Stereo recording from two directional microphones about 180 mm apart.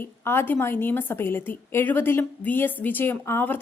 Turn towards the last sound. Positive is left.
turn(degrees=10)  # may be behind; listen again after turning